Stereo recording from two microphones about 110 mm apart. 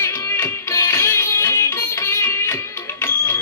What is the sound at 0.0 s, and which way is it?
Music, 25° left (ahead or behind).